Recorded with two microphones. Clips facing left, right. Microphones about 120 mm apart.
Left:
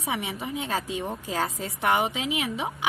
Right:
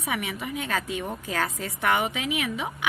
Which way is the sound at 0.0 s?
25° left (ahead or behind).